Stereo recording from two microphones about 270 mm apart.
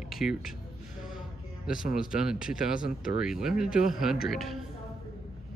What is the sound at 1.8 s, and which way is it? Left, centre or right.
Speech, left.